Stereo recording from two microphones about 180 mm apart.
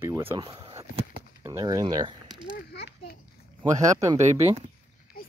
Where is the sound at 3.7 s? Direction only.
15° right (ahead or behind).